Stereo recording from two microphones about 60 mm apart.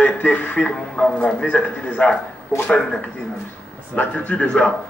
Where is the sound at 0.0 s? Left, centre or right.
Left.